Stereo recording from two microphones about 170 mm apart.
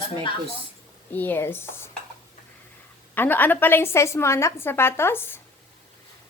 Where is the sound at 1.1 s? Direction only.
10° left (ahead or behind).